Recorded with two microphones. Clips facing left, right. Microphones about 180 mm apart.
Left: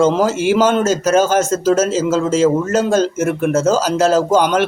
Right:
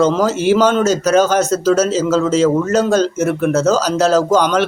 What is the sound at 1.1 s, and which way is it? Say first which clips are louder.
Speech: right 1 dB; 45° left (ahead or behind).